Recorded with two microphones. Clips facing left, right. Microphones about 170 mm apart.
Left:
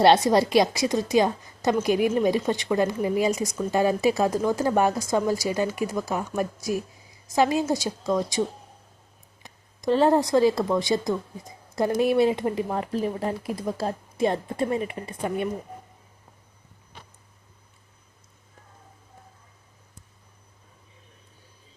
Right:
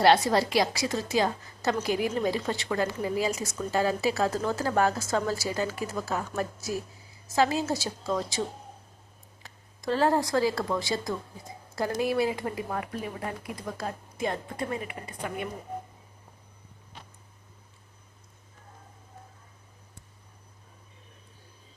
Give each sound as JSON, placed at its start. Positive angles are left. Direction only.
{"t": 0.0, "sound": "a woman's voice", "side_deg": 20}
{"t": 9.4, "sound": "a woman's voice", "side_deg": 20}